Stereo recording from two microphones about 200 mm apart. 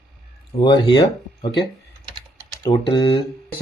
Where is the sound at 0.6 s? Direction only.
20° left (ahead or behind).